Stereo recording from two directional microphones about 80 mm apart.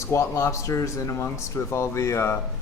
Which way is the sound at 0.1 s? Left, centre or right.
Left.